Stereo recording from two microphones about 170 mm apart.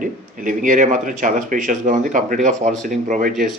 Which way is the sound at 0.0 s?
50° right (ahead or behind).